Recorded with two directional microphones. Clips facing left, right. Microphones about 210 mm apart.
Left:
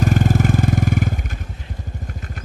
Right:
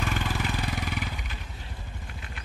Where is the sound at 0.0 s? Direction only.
45° left (ahead or behind).